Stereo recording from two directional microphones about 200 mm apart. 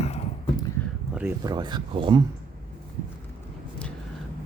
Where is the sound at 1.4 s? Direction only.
20° right (ahead or behind).